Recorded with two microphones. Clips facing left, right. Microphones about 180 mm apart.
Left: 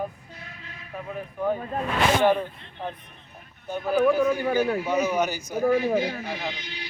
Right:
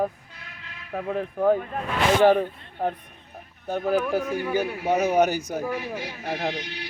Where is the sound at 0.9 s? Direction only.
70° right (ahead or behind).